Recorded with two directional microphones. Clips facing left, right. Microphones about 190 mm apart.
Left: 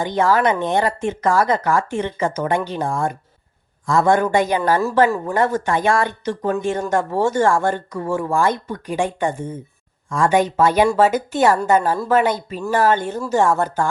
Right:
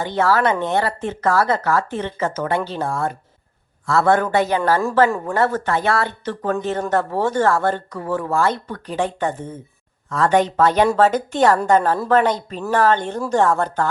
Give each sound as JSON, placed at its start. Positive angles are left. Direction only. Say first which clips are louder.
{"t": 0.0, "sound": "speech", "louder": "left 1 dB", "side_deg": 15}